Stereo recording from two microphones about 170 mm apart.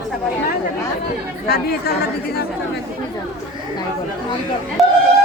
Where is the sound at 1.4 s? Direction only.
65° left (ahead or behind).